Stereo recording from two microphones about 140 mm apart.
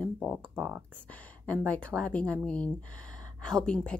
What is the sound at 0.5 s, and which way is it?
Speech, 10° right (ahead or behind).